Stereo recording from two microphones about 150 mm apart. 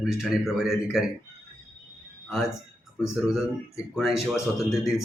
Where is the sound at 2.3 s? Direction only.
Centre (ahead or behind).